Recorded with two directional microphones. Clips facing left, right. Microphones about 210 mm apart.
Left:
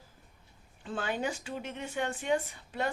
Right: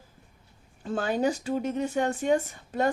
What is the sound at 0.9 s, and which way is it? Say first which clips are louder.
Speech: right 7 dB; 40° right (ahead or behind).